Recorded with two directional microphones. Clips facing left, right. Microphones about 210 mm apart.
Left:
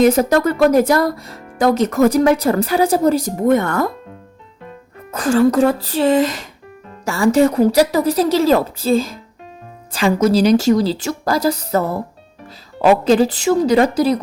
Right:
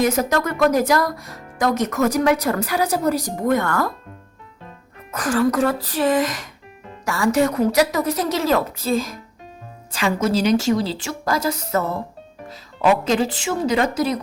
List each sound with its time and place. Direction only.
0.1 s speech: 30° left (ahead or behind)
5.1 s a woman's voice: 25° left (ahead or behind)